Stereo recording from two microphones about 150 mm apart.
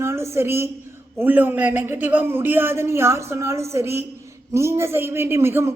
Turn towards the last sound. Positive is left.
turn(degrees=-15)  # may be behind; listen again after turning